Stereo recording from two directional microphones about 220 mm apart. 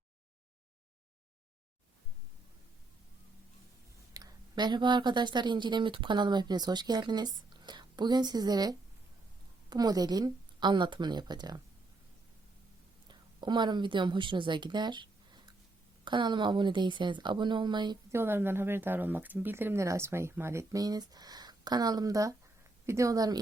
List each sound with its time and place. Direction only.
4.1 s speech: 15° right (ahead or behind)
13.1 s a woman's voice: 20° right (ahead or behind)